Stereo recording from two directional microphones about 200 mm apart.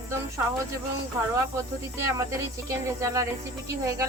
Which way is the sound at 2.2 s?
15° right (ahead or behind).